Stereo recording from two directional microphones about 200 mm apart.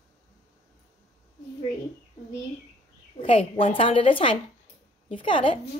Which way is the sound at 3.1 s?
25° left (ahead or behind).